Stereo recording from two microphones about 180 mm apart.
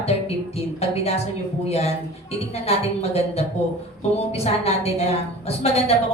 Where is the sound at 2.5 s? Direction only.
35° left (ahead or behind).